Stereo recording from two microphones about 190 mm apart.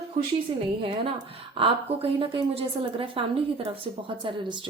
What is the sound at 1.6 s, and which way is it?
Speech, 30° right (ahead or behind).